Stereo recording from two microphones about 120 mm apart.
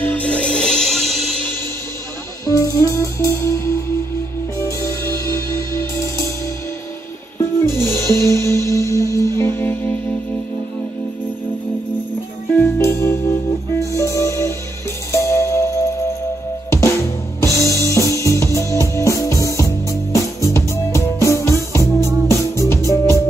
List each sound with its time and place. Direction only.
0.0 s music: 10° left (ahead or behind)
2.4 s music: 30° left (ahead or behind)
7.9 s music: 20° left (ahead or behind)
12.5 s music: 20° left (ahead or behind)
16.7 s drum kit: 25° left (ahead or behind)
17.9 s music: 25° left (ahead or behind)